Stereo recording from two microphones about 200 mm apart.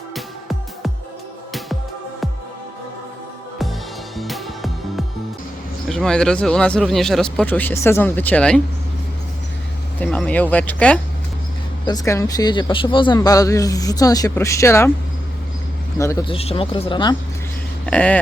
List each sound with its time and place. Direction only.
0.1 s music: centre (ahead or behind)
4.2 s music: centre (ahead or behind)
5.9 s speech: 5° left (ahead or behind)
10.0 s speech: 5° left (ahead or behind)
11.9 s speech: 15° left (ahead or behind)
16.2 s speech: 30° left (ahead or behind)
17.8 s speech: 5° left (ahead or behind)